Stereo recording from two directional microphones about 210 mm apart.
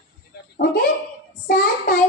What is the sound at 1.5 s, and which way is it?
Speech, 45° left (ahead or behind).